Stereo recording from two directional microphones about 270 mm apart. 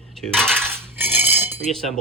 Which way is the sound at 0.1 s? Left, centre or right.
Centre.